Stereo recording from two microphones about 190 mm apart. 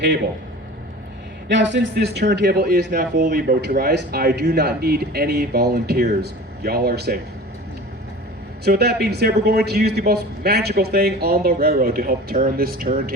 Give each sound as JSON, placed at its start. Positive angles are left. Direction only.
{"t": 1.5, "sound": "a man's voice", "side_deg": -70}
{"t": 8.6, "sound": "a man's voice", "side_deg": -60}